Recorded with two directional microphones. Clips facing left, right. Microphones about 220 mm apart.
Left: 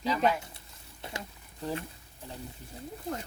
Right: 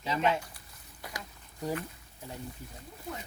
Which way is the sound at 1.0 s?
25° left (ahead or behind).